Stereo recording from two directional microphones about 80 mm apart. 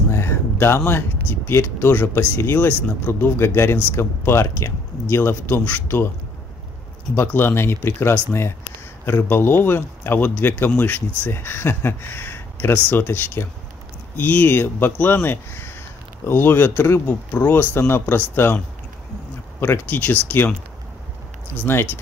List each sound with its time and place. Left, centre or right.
0.1 s speech: left
7.2 s speech: left
19.6 s speech: left
21.7 s speech: left